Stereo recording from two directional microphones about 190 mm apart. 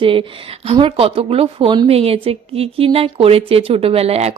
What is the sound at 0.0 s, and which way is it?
Speech, 30° right (ahead or behind).